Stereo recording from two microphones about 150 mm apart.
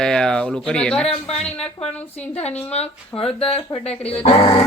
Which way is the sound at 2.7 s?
45° left (ahead or behind).